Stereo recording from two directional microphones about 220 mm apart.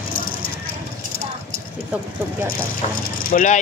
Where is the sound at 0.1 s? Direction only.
40° left (ahead or behind).